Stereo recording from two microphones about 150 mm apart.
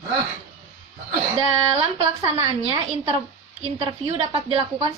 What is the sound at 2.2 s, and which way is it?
A woman's voice, 30° right (ahead or behind).